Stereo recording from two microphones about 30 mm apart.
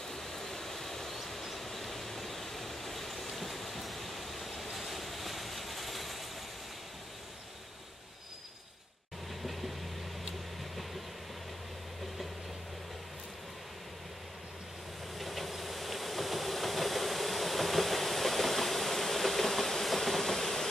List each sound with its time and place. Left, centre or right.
0.1 s vehicle: centre
4.7 s train: centre
15.1 s train: centre